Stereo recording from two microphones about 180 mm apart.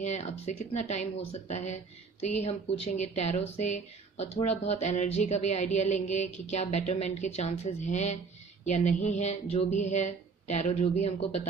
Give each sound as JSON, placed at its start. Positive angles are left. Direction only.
{"t": 0.0, "sound": "speech", "side_deg": 40}